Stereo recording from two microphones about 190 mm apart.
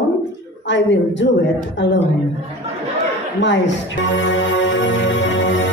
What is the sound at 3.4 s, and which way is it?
Speech, 75° left (ahead or behind).